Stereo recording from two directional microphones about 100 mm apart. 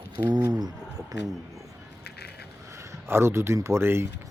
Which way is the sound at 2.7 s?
25° right (ahead or behind).